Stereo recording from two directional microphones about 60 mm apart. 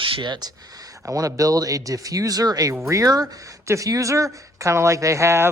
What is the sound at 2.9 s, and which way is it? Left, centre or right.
Speech, right.